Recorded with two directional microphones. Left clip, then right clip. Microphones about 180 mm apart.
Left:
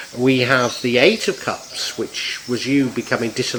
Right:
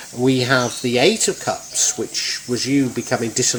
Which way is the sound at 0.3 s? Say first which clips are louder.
Left 2 dB; 25° right (ahead or behind).